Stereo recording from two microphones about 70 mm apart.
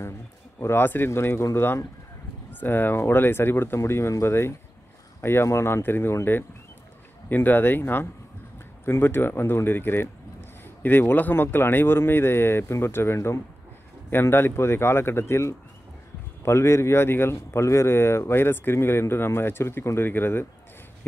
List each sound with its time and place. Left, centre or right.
0.6 s a man's voice: left
7.2 s a man's voice: left